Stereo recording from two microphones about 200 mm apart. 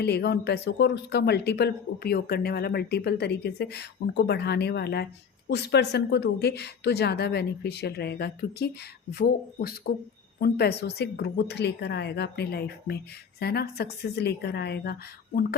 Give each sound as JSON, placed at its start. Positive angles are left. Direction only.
{"t": 0.0, "sound": "a woman's voice", "side_deg": 55}